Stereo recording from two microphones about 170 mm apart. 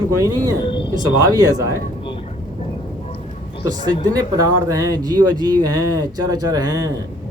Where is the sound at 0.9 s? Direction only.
20° right (ahead or behind).